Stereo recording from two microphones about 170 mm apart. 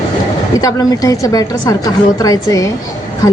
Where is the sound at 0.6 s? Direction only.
20° left (ahead or behind).